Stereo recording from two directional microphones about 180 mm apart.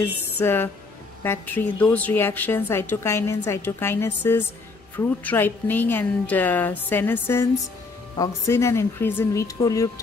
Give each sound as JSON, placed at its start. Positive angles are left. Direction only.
{"t": 0.0, "sound": "a woman's voice", "side_deg": 10}